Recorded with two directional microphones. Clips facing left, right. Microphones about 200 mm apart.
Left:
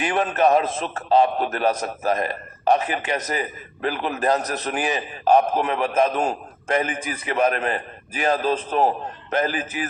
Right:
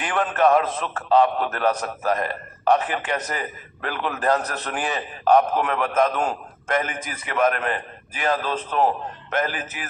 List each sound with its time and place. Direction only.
0.0 s a man's voice: 20° left (ahead or behind)
6.8 s a man's voice: 15° left (ahead or behind)
7.3 s a man's voice: 30° left (ahead or behind)